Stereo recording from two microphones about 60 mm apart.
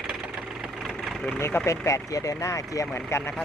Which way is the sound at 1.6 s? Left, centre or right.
Left.